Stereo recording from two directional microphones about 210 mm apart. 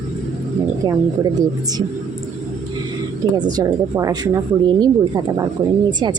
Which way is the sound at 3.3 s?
20° right (ahead or behind).